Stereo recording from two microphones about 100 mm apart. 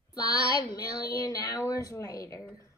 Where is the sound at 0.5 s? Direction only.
40° left (ahead or behind).